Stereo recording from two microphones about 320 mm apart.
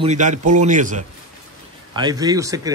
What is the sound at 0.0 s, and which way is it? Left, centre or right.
A man's voice, right.